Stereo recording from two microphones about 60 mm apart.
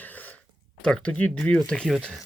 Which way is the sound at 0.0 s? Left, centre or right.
Left.